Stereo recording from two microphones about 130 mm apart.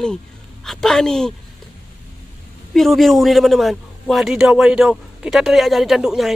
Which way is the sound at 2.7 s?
Centre (ahead or behind).